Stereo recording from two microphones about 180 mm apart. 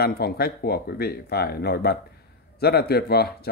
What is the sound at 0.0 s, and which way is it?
Speech, 60° left (ahead or behind).